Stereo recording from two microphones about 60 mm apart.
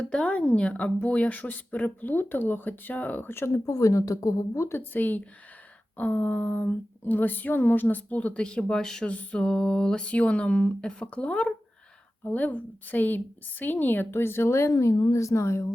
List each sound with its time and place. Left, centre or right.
0.0 s speech: centre; by 3.6 s left
3.7 s a woman's voice: left
4.8 s speech: left
14.8 s a woman's voice: left